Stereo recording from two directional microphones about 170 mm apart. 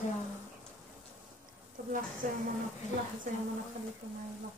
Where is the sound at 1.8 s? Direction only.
70° right (ahead or behind).